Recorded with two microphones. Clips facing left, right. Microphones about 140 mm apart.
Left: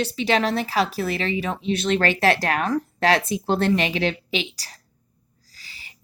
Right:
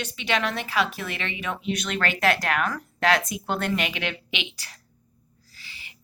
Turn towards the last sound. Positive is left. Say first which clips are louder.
# even
turn(degrees=40)  # may be behind; listen again after turning